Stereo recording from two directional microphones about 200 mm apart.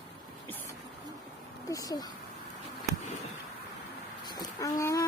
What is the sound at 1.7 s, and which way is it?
Speech, 20° left (ahead or behind).